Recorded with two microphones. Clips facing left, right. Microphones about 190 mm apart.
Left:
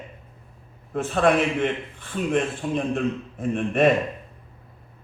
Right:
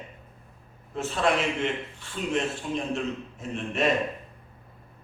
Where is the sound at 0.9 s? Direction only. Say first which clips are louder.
Left 5 dB; 55° left (ahead or behind).